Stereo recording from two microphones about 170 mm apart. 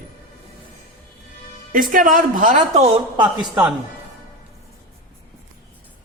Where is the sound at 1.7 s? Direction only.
55° right (ahead or behind).